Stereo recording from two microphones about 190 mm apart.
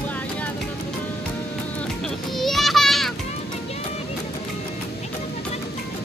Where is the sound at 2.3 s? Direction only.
Centre (ahead or behind).